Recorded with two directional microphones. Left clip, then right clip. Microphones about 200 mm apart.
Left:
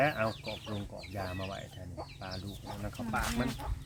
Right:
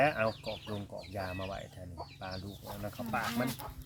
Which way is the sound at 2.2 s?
50° right (ahead or behind).